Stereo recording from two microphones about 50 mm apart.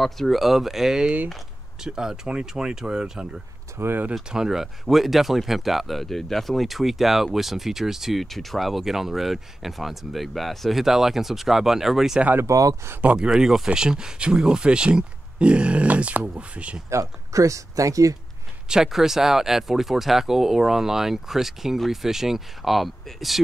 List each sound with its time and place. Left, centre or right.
0.0 s speech: centre
3.7 s speech: right
4.3 s speech: centre
12.4 s speech: right
13.0 s speech: right
13.3 s speech: centre
16.9 s speech: right
18.7 s speech: centre